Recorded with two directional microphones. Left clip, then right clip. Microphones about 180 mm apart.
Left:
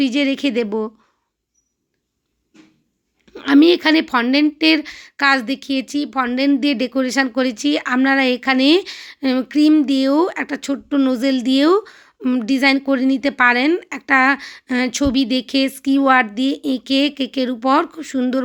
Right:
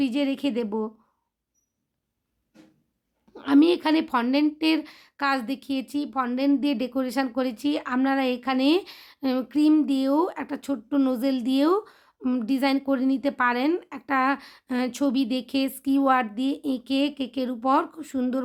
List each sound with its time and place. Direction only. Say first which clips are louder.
0.0 s speech: left 8 dB; 15° left (ahead or behind)
3.3 s speech: left 7 dB; 15° left (ahead or behind)